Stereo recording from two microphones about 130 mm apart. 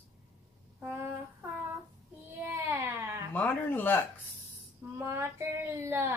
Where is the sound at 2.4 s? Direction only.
15° right (ahead or behind).